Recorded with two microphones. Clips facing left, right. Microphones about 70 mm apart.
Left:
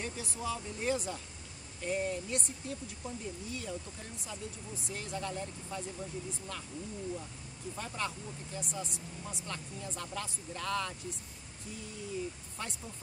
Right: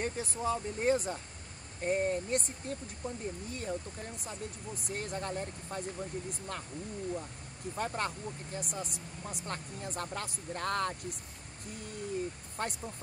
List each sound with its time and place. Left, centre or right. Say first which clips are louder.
0.0 s speech: right 4 dB; right
4.8 s speech: right 2 dB; right
7.7 s speech: right 4 dB; right